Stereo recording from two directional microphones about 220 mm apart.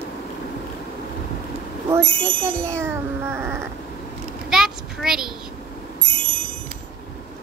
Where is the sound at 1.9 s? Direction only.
10° right (ahead or behind).